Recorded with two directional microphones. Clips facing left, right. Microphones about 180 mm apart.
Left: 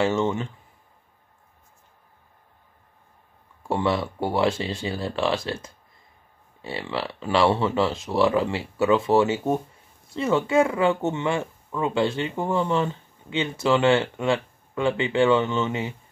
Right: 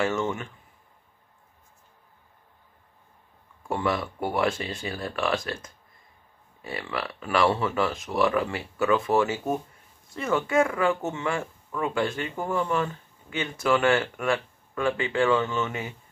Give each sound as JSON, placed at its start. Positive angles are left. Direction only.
{"t": 0.0, "sound": "speech", "side_deg": 25}
{"t": 3.6, "sound": "speech", "side_deg": 30}